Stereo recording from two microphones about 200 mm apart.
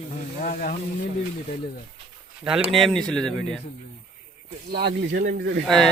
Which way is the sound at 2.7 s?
Centre (ahead or behind).